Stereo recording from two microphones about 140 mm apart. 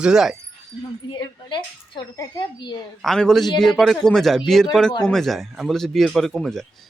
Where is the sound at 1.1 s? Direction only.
30° left (ahead or behind).